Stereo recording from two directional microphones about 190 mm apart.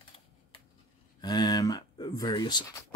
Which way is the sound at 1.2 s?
20° left (ahead or behind).